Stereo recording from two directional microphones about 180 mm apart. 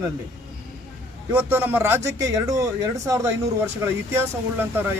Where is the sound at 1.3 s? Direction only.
10° right (ahead or behind).